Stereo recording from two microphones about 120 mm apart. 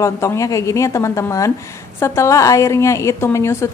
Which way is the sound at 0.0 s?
25° left (ahead or behind).